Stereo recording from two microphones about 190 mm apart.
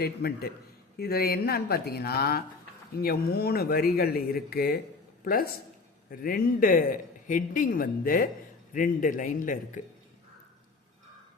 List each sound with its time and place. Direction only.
0.0 s a man's voice: 55° left (ahead or behind)